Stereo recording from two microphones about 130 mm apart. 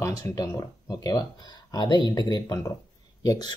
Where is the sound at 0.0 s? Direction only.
25° left (ahead or behind).